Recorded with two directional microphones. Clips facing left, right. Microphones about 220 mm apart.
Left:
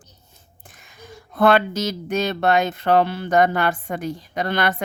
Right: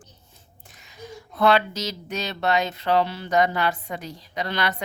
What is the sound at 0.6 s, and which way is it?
Speech, 50° left (ahead or behind).